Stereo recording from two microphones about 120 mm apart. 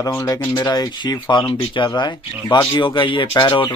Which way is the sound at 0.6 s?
40° left (ahead or behind).